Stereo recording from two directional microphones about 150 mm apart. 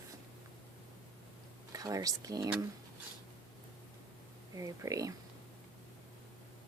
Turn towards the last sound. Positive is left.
turn(degrees=-25)  # may be behind; listen again after turning